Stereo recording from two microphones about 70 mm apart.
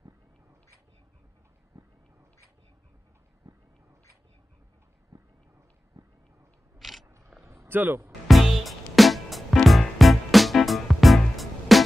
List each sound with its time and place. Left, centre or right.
6.8 s mechanisms: centre
7.4 s a sound: right
8.3 s music: centre